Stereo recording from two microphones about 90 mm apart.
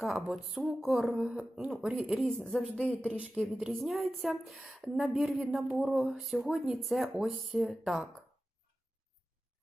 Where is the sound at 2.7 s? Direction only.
15° left (ahead or behind).